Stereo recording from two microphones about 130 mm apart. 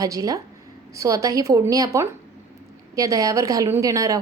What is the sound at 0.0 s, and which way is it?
A woman's voice, 25° right (ahead or behind).